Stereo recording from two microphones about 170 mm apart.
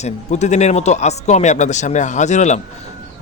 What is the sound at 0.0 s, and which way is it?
Speech, 40° left (ahead or behind).